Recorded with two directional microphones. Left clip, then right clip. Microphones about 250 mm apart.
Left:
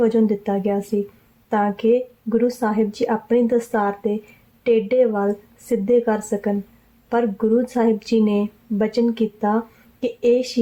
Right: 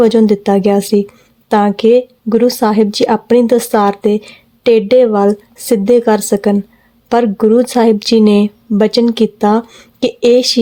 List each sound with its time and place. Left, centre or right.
0.0 s speech: right